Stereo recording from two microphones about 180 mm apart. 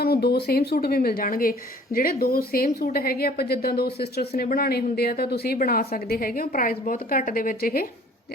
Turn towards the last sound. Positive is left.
turn(degrees=55)  # may be behind; listen again after turning